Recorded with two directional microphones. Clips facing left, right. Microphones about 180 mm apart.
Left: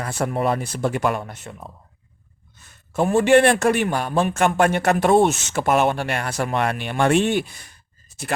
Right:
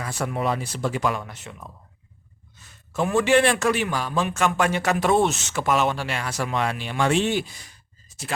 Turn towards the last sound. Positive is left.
turn(degrees=55)  # may be behind; listen again after turning